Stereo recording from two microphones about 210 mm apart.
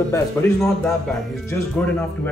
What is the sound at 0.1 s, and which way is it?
Speech, 15° left (ahead or behind).